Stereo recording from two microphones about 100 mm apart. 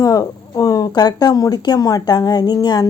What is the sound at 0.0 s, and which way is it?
A woman's voice, 40° left (ahead or behind).